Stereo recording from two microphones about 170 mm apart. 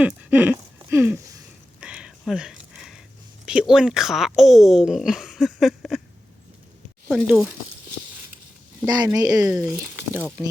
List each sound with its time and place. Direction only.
0.0 s speech: 10° right (ahead or behind)
0.9 s a sound: 15° right (ahead or behind)
1.8 s a sound: 5° right (ahead or behind)
3.4 s speech: 5° right (ahead or behind)
7.1 s speech: centre (ahead or behind)
9.1 s speech: 20° right (ahead or behind)